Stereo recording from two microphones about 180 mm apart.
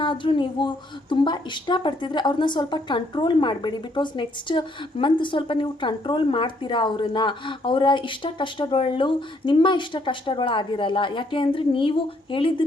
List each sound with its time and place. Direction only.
0.0 s a woman's voice: 25° left (ahead or behind)